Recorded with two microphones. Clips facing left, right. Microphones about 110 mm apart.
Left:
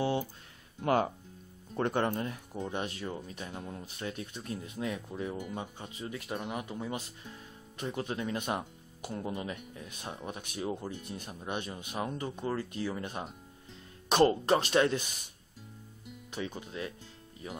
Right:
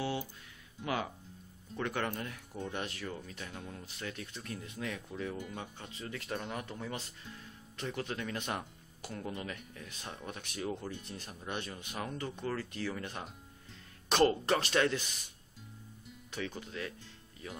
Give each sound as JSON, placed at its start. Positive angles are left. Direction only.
{"t": 0.0, "sound": "a sound", "side_deg": 30}
{"t": 0.8, "sound": "speech", "side_deg": 40}
{"t": 1.8, "sound": "speech", "side_deg": 30}
{"t": 16.3, "sound": "speech", "side_deg": 20}